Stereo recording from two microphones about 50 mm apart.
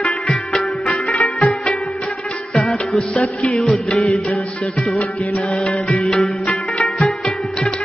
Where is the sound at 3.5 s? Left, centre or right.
Centre.